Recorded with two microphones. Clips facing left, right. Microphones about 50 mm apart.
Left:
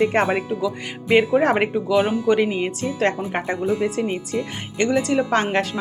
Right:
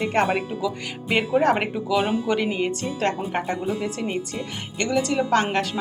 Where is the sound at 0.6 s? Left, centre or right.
Centre.